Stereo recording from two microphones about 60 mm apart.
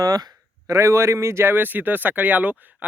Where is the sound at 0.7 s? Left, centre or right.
Right.